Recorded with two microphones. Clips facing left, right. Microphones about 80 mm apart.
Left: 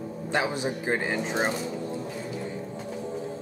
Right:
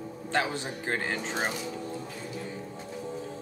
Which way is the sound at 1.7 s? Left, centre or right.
Centre.